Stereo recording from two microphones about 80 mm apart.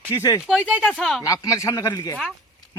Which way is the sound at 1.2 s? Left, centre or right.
Left.